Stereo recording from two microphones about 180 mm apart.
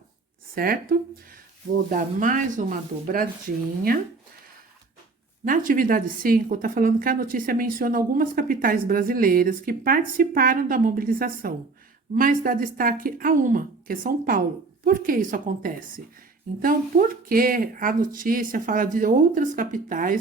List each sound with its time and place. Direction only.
0.5 s speech: 55° right (ahead or behind)
5.5 s speech: 50° right (ahead or behind)